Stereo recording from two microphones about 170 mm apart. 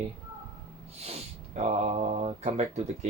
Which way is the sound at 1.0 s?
40° right (ahead or behind).